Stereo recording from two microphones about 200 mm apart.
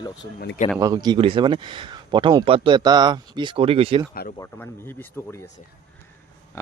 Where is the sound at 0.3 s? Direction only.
45° left (ahead or behind).